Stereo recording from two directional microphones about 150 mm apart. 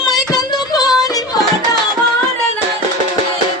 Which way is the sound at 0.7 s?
25° left (ahead or behind).